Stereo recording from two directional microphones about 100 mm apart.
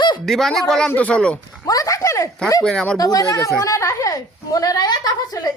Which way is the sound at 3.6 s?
30° left (ahead or behind).